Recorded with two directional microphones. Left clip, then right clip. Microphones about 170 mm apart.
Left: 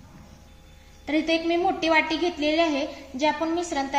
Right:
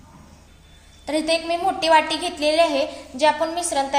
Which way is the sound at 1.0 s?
55° right (ahead or behind).